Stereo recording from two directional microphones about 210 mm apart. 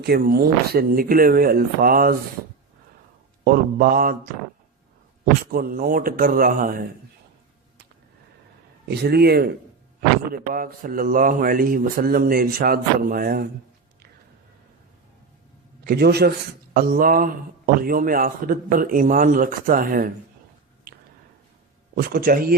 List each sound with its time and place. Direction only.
0.0 s speech: 50° right (ahead or behind)
3.4 s speech: 45° right (ahead or behind)
5.2 s speech: 45° right (ahead or behind)
8.9 s speech: 50° right (ahead or behind)
15.8 s speech: 50° right (ahead or behind)
21.9 s speech: 45° right (ahead or behind)